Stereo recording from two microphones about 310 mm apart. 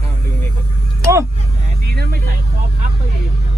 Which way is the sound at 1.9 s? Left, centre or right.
Right.